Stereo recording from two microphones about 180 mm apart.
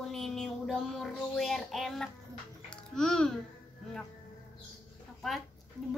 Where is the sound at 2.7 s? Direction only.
5° left (ahead or behind).